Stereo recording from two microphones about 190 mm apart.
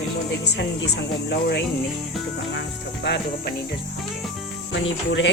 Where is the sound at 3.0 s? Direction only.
65° left (ahead or behind).